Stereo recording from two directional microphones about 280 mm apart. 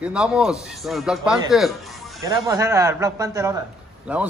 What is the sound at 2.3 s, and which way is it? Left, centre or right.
A man's voice, centre.